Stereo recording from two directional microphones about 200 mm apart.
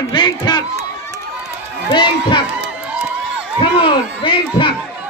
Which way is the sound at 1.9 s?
25° left (ahead or behind).